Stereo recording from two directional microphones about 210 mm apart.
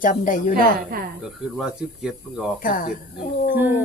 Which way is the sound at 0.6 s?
45° right (ahead or behind).